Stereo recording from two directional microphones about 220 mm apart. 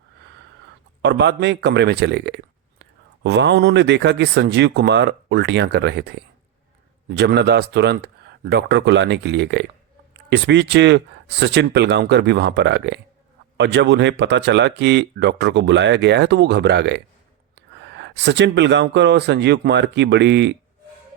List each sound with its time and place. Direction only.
1.0 s speech: 50° right (ahead or behind)